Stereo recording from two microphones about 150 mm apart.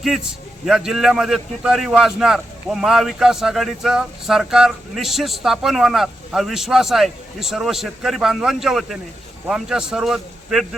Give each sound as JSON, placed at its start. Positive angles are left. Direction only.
{"t": 0.6, "sound": "a man's voice", "side_deg": -5}